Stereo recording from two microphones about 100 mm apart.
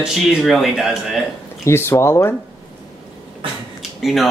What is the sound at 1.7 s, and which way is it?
Speech, 25° left (ahead or behind).